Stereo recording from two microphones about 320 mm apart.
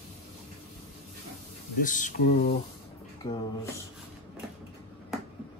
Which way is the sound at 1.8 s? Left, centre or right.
Left.